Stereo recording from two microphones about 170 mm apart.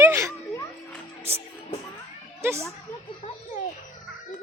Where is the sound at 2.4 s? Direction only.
15° right (ahead or behind).